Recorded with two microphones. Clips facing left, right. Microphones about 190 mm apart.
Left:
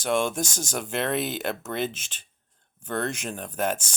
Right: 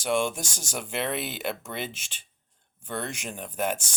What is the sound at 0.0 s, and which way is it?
Speech, 15° right (ahead or behind).